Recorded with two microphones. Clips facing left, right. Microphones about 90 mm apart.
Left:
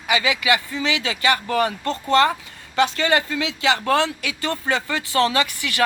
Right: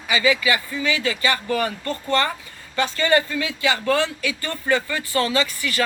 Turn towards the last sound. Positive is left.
turn(degrees=65)  # may be behind; listen again after turning